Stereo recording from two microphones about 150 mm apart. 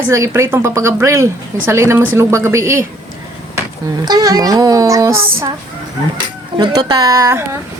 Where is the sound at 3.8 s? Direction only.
25° right (ahead or behind).